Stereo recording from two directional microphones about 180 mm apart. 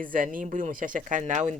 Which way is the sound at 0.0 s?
50° right (ahead or behind).